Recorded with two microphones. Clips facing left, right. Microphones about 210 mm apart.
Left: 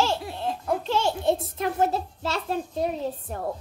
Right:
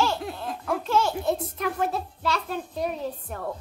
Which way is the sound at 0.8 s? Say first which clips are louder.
Right 4 dB; 30° left (ahead or behind).